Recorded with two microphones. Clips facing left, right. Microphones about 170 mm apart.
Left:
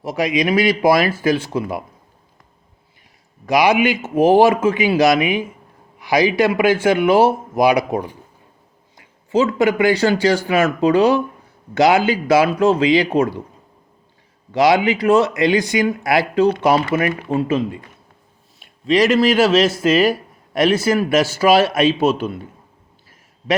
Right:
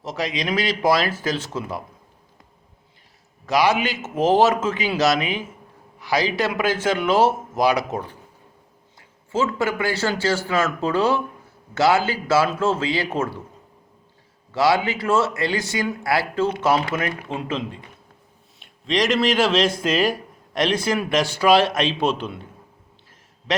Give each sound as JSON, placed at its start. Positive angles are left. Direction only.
{"t": 0.0, "sound": "a man's voice", "side_deg": 10}
{"t": 3.4, "sound": "a man's voice", "side_deg": 15}
{"t": 9.0, "sound": "a sound", "side_deg": 15}
{"t": 9.6, "sound": "a man's voice", "side_deg": 15}
{"t": 14.5, "sound": "a man's voice", "side_deg": 15}